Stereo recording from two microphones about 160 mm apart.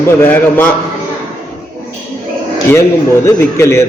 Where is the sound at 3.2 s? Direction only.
15° left (ahead or behind).